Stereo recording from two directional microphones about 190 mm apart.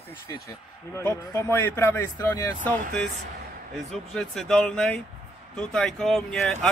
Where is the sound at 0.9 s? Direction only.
15° left (ahead or behind).